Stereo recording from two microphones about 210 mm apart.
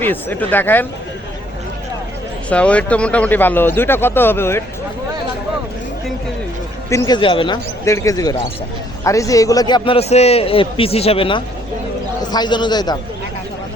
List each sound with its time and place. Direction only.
0.0 s speech: 10° left (ahead or behind)
2.5 s speech: 5° left (ahead or behind)
6.9 s a man's voice: 20° left (ahead or behind)